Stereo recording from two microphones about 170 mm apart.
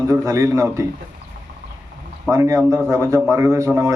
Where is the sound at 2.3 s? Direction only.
15° right (ahead or behind).